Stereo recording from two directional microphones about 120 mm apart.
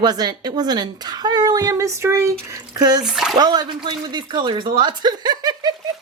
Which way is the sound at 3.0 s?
5° right (ahead or behind).